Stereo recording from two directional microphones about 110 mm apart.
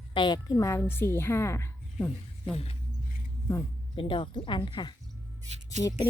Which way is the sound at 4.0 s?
50° left (ahead or behind).